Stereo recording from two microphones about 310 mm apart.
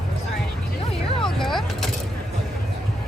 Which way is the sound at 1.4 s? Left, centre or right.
Centre.